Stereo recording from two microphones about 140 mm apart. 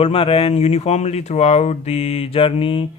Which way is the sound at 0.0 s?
45° left (ahead or behind).